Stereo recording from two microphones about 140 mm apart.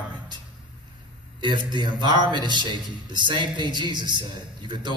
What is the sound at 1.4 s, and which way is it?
A man's voice, 35° right (ahead or behind).